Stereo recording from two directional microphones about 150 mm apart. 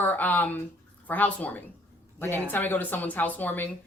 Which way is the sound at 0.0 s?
10° left (ahead or behind).